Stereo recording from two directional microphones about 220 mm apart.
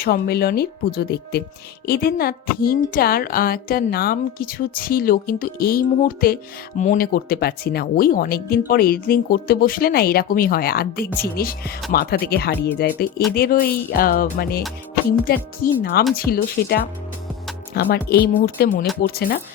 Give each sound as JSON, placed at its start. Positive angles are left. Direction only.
{"t": 0.0, "sound": "a woman's voice", "side_deg": 45}